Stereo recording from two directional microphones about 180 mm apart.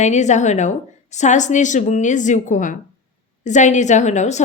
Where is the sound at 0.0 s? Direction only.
40° left (ahead or behind).